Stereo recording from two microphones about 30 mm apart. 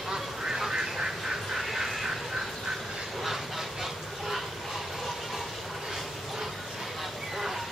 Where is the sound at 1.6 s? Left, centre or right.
Centre.